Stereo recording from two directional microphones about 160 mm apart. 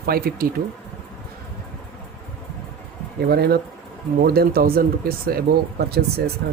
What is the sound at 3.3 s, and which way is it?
Speech, 75° right (ahead or behind).